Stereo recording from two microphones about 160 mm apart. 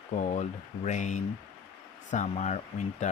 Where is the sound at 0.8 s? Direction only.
50° left (ahead or behind).